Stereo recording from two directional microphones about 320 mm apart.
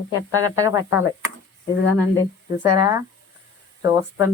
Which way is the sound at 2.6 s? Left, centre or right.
Centre.